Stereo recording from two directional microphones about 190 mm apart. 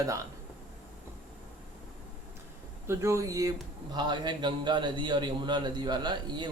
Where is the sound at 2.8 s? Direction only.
15° right (ahead or behind).